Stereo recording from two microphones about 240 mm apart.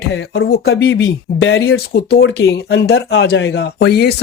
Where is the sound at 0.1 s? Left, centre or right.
Left.